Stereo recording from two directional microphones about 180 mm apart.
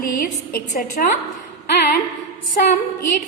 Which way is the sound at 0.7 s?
50° left (ahead or behind).